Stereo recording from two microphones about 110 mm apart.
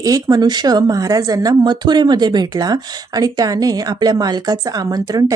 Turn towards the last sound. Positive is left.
turn(degrees=-35)  # may be behind; listen again after turning